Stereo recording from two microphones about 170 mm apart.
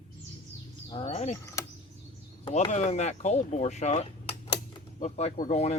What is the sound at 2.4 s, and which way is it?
Speech, 40° left (ahead or behind).